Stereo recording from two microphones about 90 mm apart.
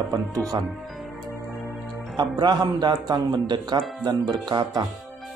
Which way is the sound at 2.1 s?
50° right (ahead or behind).